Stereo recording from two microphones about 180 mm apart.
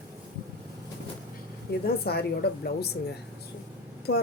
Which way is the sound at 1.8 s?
60° left (ahead or behind).